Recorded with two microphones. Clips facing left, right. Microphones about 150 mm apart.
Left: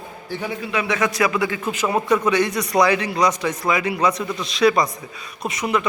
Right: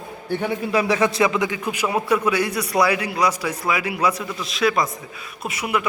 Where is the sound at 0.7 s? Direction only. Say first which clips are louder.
Right 3 dB; 35° right (ahead or behind).